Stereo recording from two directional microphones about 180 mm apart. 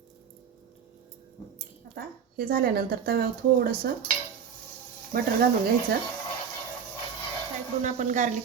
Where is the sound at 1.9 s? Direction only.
55° right (ahead or behind).